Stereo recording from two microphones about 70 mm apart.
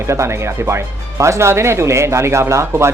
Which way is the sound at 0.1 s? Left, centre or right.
Right.